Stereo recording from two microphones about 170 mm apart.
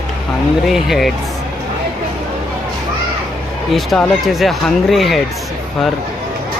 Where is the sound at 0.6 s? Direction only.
Centre (ahead or behind).